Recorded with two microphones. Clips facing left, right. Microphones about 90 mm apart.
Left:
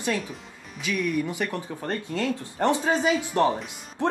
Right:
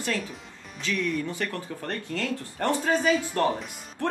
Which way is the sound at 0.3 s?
10° left (ahead or behind).